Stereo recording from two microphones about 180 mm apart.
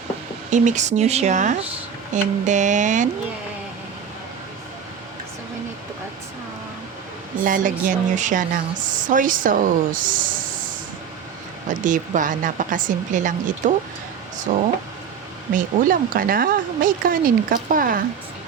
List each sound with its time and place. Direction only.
0.5 s speech: 45° right (ahead or behind)
7.4 s speech: 50° right (ahead or behind)
11.7 s speech: 45° right (ahead or behind)
15.5 s speech: 50° right (ahead or behind)